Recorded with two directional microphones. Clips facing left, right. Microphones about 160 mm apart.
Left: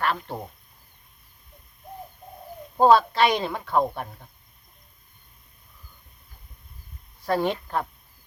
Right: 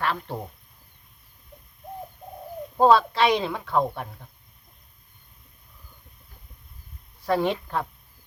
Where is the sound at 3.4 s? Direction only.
Centre (ahead or behind).